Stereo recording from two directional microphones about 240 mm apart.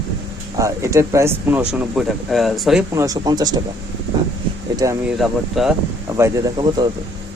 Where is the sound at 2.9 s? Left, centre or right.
Centre.